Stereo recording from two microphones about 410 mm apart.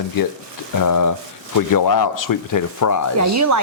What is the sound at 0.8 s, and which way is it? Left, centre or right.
Speech, left.